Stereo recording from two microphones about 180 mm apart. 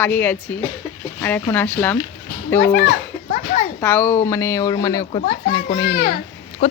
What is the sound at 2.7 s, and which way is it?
Speech, 55° left (ahead or behind).